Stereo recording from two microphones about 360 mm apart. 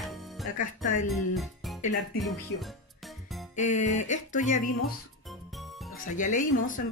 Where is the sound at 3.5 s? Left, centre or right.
Centre.